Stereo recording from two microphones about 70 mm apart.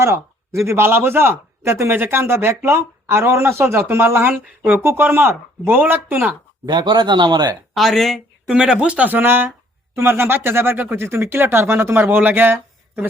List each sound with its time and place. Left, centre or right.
0.0 s a man's voice: right
6.7 s speech: right
7.7 s speech: centre
8.4 s a man's voice: centre; by 12.5 s right